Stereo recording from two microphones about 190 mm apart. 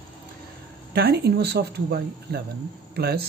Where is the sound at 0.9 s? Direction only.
60° right (ahead or behind).